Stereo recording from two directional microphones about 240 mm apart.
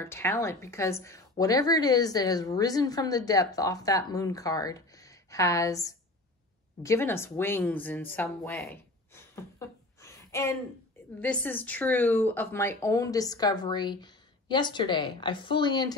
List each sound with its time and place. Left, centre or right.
0.0 s a woman's voice: centre